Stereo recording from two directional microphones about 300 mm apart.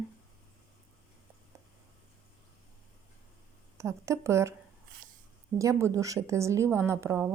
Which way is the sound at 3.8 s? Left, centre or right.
Centre.